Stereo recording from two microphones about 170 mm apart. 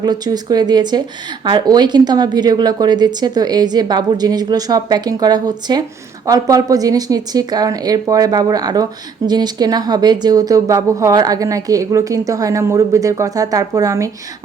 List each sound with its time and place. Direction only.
0.0 s speech: 25° right (ahead or behind)